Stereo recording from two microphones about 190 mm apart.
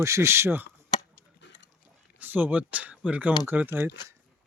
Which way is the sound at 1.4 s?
70° left (ahead or behind).